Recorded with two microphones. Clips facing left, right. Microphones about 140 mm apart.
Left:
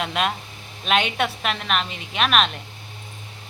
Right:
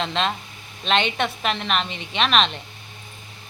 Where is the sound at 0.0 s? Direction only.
10° left (ahead or behind).